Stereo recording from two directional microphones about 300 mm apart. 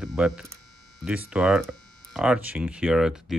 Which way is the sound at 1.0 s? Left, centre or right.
Centre.